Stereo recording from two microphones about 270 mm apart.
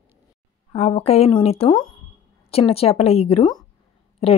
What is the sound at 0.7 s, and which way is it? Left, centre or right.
A woman's voice, left.